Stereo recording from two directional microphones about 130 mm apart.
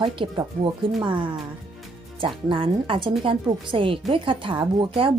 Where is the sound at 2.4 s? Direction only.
40° right (ahead or behind).